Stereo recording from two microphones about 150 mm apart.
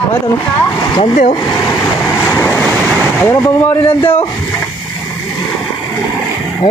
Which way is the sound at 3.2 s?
15° left (ahead or behind).